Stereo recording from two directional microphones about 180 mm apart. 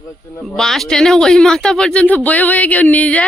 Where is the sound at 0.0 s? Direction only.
15° left (ahead or behind).